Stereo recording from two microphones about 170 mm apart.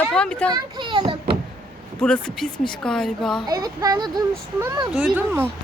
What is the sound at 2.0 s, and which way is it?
Speech, 5° left (ahead or behind).